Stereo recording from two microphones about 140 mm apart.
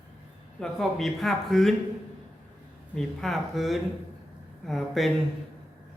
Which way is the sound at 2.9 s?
Centre (ahead or behind).